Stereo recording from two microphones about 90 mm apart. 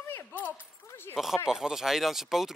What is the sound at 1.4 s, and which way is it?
Speech, 5° right (ahead or behind).